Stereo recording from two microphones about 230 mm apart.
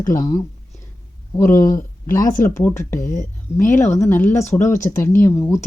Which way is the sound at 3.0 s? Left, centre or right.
Left.